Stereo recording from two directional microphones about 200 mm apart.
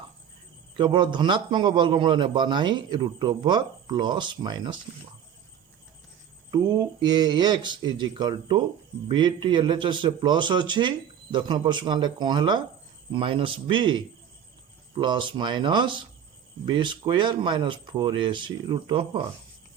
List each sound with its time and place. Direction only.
0.8 s a man's voice: 25° right (ahead or behind)
6.5 s a man's voice: 20° right (ahead or behind)